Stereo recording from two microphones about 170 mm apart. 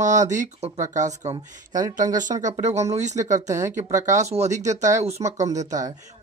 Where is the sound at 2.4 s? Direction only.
40° right (ahead or behind).